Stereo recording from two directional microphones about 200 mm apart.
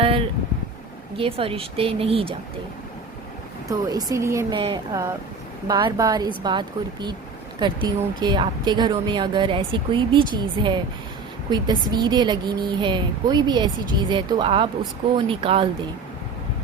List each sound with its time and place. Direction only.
0.0 s a sound: 30° right (ahead or behind)
1.1 s speech: 25° right (ahead or behind)
3.7 s speech: 15° right (ahead or behind)